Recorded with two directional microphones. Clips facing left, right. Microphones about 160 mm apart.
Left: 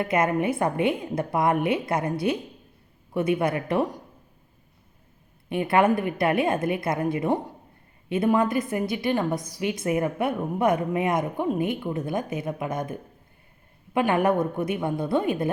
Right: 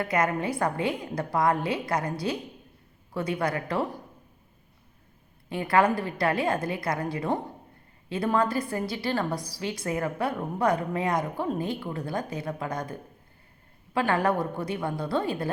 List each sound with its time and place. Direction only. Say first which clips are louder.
0.0 s a woman's voice: left 3 dB; 25° left (ahead or behind)
5.5 s a woman's voice: left 2 dB; 20° left (ahead or behind)